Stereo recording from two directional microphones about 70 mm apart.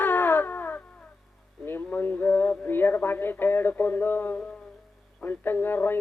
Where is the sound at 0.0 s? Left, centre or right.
Left.